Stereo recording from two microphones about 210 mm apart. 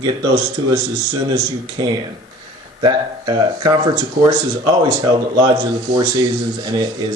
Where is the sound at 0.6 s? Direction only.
20° right (ahead or behind).